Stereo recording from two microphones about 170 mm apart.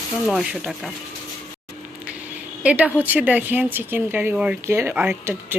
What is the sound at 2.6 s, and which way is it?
Speech, 10° right (ahead or behind).